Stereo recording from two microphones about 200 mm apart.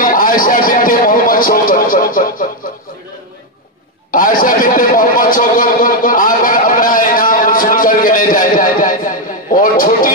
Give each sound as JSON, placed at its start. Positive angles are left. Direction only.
{"t": 0.0, "sound": "a man's voice", "side_deg": 45}
{"t": 4.1, "sound": "a man's voice", "side_deg": 45}